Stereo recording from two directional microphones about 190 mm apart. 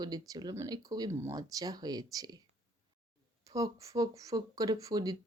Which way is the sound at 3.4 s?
15° right (ahead or behind).